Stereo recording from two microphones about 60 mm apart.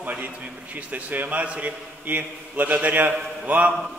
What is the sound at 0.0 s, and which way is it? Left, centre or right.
A man's voice, right.